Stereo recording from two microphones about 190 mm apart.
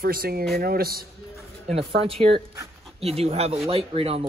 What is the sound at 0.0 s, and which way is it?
Speech, 50° right (ahead or behind).